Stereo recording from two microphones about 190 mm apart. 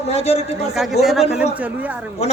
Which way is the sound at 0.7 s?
Centre (ahead or behind).